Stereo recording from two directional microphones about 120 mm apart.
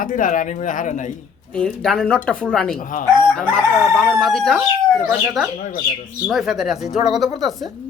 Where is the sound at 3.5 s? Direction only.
5° left (ahead or behind).